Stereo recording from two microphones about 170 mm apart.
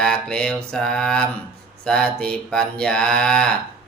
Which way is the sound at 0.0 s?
5° left (ahead or behind).